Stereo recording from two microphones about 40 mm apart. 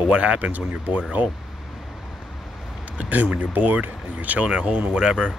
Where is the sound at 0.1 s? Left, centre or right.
Right.